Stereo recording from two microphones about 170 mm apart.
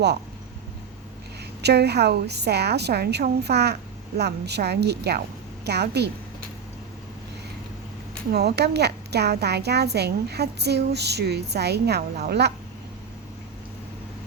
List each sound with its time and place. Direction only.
1.6 s speech: 75° right (ahead or behind)
8.3 s speech: 75° right (ahead or behind)